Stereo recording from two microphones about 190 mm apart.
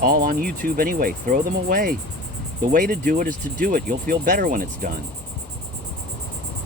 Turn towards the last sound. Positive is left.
turn(degrees=-50)  # may be behind; listen again after turning